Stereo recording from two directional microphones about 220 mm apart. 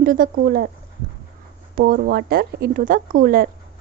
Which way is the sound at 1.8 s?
40° right (ahead or behind).